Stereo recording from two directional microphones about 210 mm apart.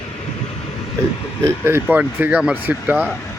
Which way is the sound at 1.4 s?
10° right (ahead or behind).